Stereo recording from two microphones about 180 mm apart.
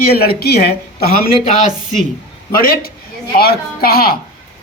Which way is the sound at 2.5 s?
55° left (ahead or behind).